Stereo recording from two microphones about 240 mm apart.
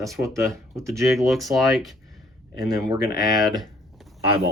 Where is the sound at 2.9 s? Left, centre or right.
Centre.